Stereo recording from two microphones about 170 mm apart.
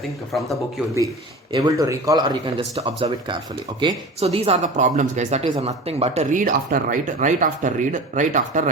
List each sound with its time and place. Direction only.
0.3 s speech: centre (ahead or behind)
1.5 s speech: 20° right (ahead or behind); by 8.7 s 45° right (ahead or behind)